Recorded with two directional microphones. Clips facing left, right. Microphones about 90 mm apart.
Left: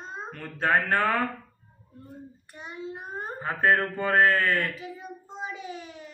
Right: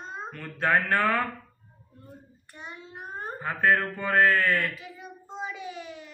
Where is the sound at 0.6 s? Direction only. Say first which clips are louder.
Even; 25° left (ahead or behind).